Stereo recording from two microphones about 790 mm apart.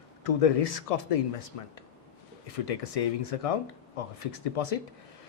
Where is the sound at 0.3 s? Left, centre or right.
Left.